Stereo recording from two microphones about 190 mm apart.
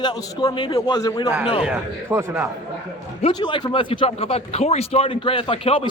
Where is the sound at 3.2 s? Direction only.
25° left (ahead or behind).